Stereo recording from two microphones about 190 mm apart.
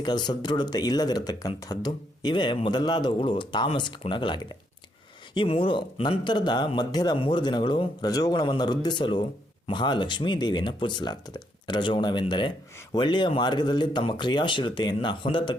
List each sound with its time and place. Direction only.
0.0 s speech: 20° left (ahead or behind)